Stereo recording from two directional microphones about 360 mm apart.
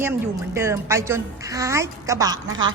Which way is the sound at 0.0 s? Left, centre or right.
Centre.